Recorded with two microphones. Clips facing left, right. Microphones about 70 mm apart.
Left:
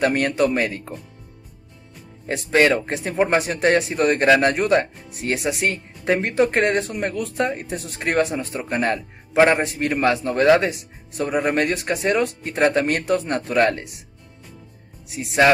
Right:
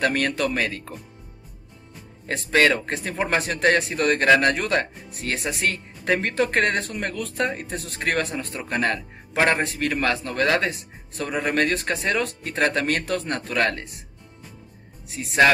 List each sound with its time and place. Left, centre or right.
0.0 s a man's voice: centre
2.5 s a man's voice: left
6.1 s a man's voice: left
15.1 s speech: centre